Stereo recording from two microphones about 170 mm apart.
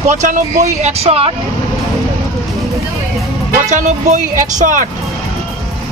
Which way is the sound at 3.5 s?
45° right (ahead or behind).